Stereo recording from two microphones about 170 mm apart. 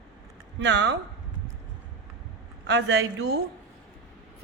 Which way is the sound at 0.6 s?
90° right.